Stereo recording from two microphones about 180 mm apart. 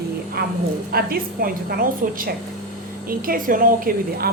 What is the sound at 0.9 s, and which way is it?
A woman's voice, 55° right (ahead or behind).